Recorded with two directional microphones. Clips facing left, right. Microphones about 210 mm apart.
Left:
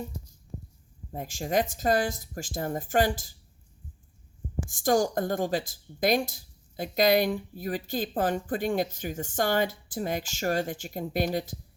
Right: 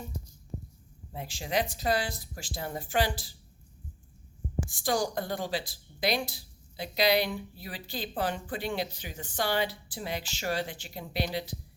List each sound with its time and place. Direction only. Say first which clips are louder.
1.1 s speech: left 4 dB; 45° left (ahead or behind)
4.7 s speech: left 6 dB; 45° left (ahead or behind)